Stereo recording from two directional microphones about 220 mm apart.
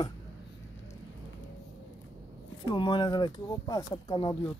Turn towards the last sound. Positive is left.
turn(degrees=20)  # may be behind; listen again after turning